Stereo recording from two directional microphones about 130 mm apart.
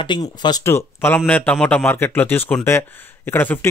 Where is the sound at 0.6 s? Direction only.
20° left (ahead or behind).